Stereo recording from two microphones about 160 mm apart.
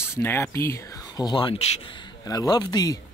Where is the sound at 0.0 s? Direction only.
15° left (ahead or behind).